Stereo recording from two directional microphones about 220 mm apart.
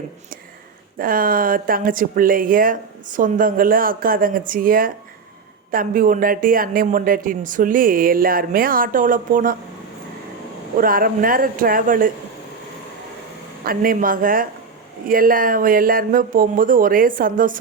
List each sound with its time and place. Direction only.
0.9 s speech: 40° right (ahead or behind)
10.8 s speech: 40° right (ahead or behind)
13.7 s speech: 40° right (ahead or behind)